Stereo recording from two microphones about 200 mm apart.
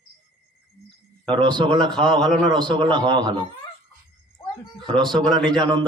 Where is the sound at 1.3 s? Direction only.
25° right (ahead or behind).